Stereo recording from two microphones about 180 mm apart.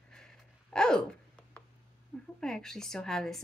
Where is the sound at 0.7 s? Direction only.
5° left (ahead or behind).